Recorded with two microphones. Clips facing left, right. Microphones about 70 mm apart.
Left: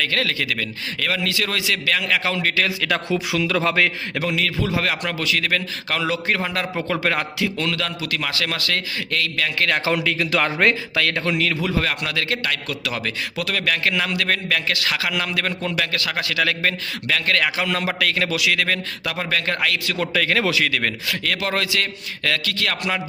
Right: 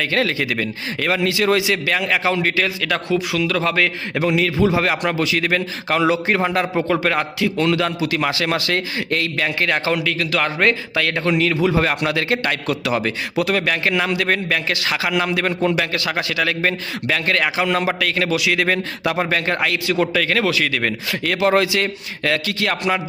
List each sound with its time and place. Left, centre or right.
0.0 s a man's voice: centre
2.6 s a man's voice: centre
4.1 s a man's voice: centre
7.5 s a man's voice: centre
9.6 s a man's voice: centre
9.8 s a man's voice: centre
11.8 s a man's voice: right
12.9 s a man's voice: centre
18.6 s a man's voice: centre